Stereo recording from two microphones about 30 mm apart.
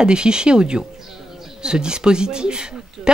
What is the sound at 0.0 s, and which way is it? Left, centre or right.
Speech, right.